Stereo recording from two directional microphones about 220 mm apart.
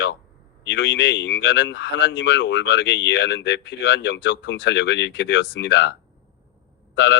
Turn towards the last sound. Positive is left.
turn(degrees=55)  # may be behind; listen again after turning